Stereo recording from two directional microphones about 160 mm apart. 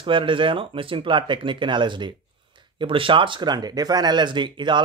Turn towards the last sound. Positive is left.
turn(degrees=-30)  # may be behind; listen again after turning